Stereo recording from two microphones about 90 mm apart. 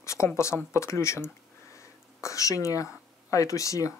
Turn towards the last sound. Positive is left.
turn(degrees=35)  # may be behind; listen again after turning